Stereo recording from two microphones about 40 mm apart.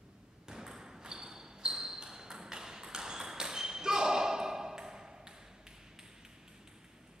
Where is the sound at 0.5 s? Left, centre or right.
Centre.